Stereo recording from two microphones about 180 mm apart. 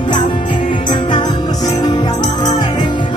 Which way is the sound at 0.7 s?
25° left (ahead or behind).